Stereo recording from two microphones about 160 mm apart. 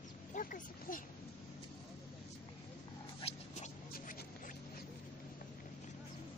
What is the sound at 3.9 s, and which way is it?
Music, 65° left (ahead or behind).